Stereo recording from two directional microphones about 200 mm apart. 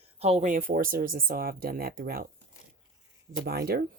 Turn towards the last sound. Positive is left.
turn(degrees=-50)  # may be behind; listen again after turning